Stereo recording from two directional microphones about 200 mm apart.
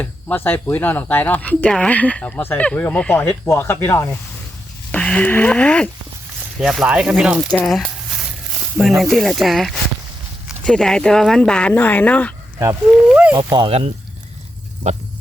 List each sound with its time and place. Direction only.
0.0 s speech: 10° left (ahead or behind); by 7.5 s 5° right (ahead or behind)
7.5 s a sound: 5° left (ahead or behind)
9.0 s speech: centre (ahead or behind)
12.5 s speech: 10° right (ahead or behind)
13.4 s speech: 25° right (ahead or behind)